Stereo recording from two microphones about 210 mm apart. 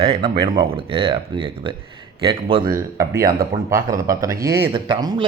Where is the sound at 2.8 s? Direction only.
15° right (ahead or behind).